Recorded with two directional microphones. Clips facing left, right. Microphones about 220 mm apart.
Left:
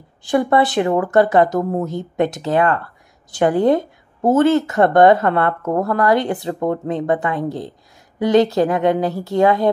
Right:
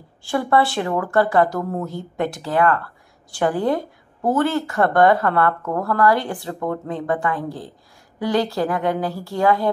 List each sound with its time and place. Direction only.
0.2 s speech: 20° left (ahead or behind)